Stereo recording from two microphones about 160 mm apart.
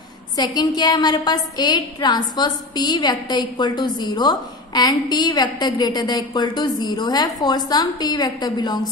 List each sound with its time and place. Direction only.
0.4 s a woman's voice: 25° left (ahead or behind)